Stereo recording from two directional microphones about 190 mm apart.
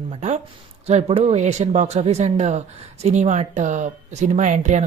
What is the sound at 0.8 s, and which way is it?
Speech, 35° right (ahead or behind).